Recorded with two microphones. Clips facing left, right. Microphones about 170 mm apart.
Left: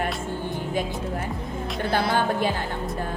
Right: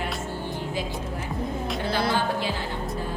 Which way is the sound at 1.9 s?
50° left (ahead or behind).